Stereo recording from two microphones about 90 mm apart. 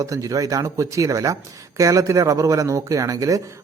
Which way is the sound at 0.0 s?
40° right (ahead or behind).